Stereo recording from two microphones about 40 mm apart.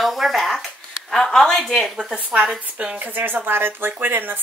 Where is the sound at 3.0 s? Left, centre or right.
Right.